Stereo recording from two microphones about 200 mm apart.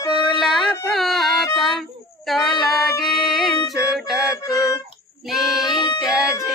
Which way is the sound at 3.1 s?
Centre (ahead or behind).